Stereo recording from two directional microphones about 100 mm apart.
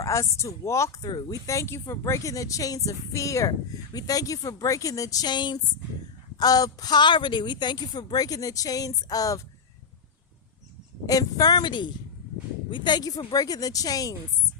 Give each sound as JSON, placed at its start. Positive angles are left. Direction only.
{"t": 0.0, "sound": "speech", "side_deg": 30}
{"t": 11.0, "sound": "speech", "side_deg": 40}